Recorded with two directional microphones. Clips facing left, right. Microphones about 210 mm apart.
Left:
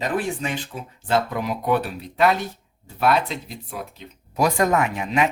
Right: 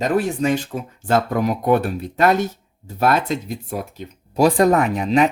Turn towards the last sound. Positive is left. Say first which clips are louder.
# right 5 dB
turn(degrees=-35)  # may be behind; listen again after turning